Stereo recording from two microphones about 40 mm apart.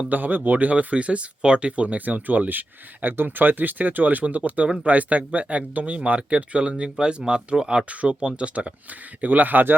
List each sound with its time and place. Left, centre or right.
0.1 s speech: right
9.2 s speech: right